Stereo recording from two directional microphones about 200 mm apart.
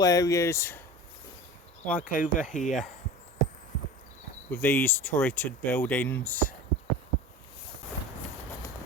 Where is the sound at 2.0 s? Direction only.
40° left (ahead or behind).